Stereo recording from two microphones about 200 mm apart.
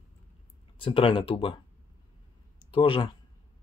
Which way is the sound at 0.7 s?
25° left (ahead or behind).